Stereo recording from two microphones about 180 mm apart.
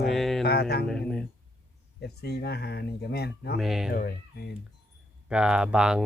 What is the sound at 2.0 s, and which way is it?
Speech, 65° left (ahead or behind).